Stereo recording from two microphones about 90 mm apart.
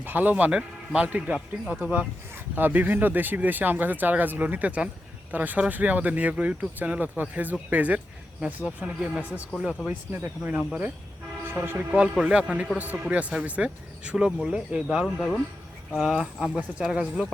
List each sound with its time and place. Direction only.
0.0 s speech: 20° right (ahead or behind); by 9.9 s 5° right (ahead or behind)
9.9 s speech: 20° right (ahead or behind)
11.6 s speech: 25° right (ahead or behind)
12.1 s speech: 10° right (ahead or behind)